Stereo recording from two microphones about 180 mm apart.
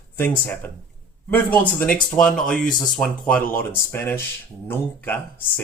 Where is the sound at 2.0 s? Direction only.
5° left (ahead or behind).